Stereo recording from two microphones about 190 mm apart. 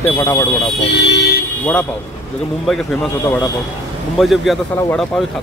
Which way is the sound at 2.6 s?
Centre (ahead or behind).